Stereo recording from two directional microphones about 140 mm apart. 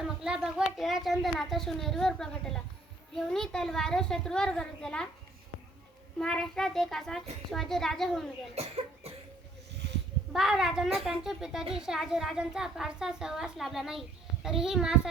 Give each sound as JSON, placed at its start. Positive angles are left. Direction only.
{"t": 0.2, "sound": "speech", "side_deg": -5}
{"t": 6.1, "sound": "speech", "side_deg": 5}
{"t": 8.5, "sound": "cough", "side_deg": -45}
{"t": 10.3, "sound": "speech", "side_deg": 0}